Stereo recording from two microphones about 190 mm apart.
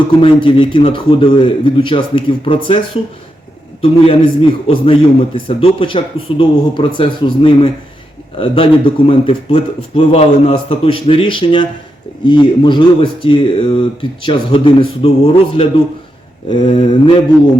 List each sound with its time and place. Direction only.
0.2 s speech: 25° left (ahead or behind)